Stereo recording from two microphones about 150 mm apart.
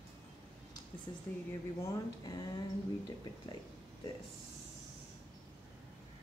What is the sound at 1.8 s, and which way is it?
Speech, 25° left (ahead or behind).